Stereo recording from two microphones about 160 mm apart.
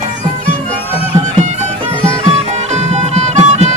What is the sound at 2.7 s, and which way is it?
Music, 45° right (ahead or behind).